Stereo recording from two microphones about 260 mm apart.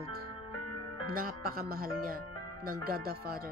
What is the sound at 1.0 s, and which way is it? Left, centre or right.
Speech, right.